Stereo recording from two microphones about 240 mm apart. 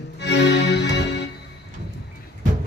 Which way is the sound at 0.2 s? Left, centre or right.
Left.